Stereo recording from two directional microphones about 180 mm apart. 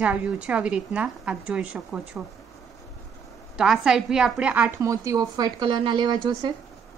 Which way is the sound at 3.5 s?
Centre (ahead or behind).